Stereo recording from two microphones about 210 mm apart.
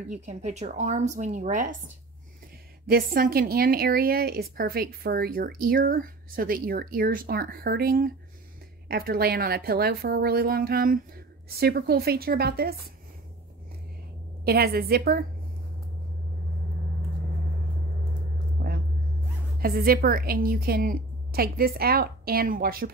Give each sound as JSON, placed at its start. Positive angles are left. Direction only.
{"t": 0.1, "sound": "speech", "side_deg": -35}
{"t": 2.9, "sound": "a woman's voice", "side_deg": -45}
{"t": 14.4, "sound": "a woman's voice", "side_deg": -45}
{"t": 18.6, "sound": "a sound", "side_deg": -50}
{"t": 19.6, "sound": "a woman's voice", "side_deg": -45}